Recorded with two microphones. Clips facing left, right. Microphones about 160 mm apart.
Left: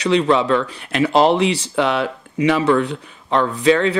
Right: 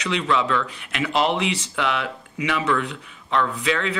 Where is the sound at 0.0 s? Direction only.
35° left (ahead or behind).